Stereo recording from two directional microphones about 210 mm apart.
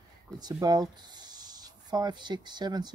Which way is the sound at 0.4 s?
20° right (ahead or behind).